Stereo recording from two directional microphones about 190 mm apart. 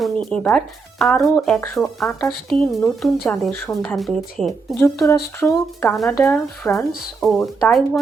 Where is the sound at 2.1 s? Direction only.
15° left (ahead or behind).